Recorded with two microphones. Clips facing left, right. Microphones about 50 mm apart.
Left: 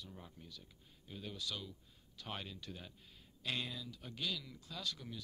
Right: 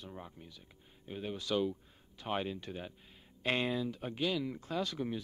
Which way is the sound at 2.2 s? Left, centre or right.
Right.